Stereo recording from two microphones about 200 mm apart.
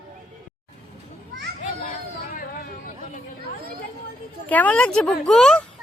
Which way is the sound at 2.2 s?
45° left (ahead or behind).